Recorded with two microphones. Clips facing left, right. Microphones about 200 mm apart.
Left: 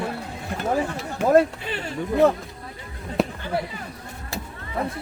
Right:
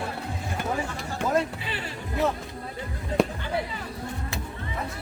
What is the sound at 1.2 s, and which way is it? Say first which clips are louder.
Speech: left 7 dB; 5° left (ahead or behind).